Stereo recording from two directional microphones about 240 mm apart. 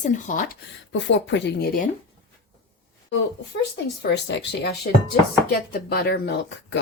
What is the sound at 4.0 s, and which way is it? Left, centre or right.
A woman's voice, left.